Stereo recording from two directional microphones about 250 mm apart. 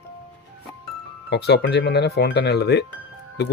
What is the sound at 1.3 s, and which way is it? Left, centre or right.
Speech, left.